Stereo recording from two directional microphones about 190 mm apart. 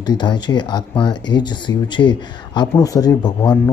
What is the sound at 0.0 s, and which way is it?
Speech, 20° left (ahead or behind).